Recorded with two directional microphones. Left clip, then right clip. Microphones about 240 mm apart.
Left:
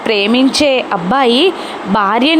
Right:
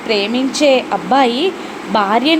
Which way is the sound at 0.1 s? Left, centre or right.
Left.